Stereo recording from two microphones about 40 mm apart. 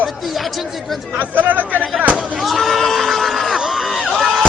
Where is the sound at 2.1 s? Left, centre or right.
Centre.